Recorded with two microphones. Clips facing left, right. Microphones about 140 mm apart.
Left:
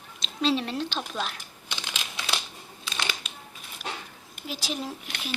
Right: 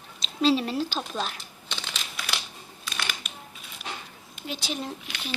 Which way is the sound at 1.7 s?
10° left (ahead or behind).